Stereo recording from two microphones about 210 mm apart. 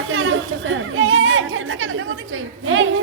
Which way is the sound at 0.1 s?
70° right (ahead or behind).